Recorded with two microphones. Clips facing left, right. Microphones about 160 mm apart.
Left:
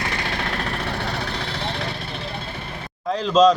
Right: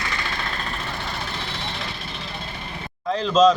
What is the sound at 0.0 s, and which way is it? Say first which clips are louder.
Vehicle: left 3 dB; 65° left (ahead or behind).